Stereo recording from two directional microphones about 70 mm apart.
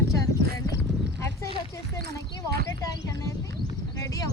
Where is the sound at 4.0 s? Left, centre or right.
Left.